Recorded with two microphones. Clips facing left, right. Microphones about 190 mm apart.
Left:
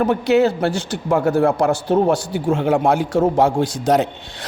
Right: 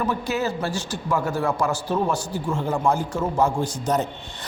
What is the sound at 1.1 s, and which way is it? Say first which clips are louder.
A man's voice: left 8 dB; 55° left (ahead or behind).